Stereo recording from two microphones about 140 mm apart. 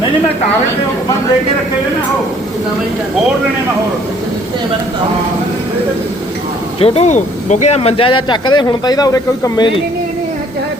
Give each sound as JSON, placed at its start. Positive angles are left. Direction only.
{"t": 6.7, "sound": "speech", "side_deg": 45}